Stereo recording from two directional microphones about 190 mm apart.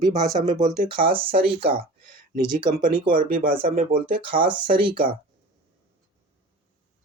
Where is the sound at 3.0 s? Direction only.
45° right (ahead or behind).